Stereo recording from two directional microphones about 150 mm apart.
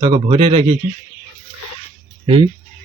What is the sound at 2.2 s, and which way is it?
Speech, 35° right (ahead or behind).